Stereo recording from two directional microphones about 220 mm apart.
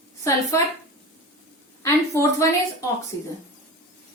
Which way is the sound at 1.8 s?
10° left (ahead or behind).